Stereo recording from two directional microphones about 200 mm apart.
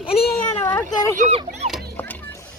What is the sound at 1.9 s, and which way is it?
Music, 10° left (ahead or behind).